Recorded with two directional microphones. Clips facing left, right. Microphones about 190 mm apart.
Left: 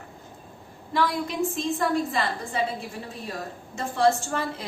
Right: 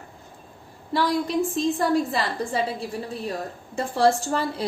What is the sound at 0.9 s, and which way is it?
A woman's voice, 35° right (ahead or behind).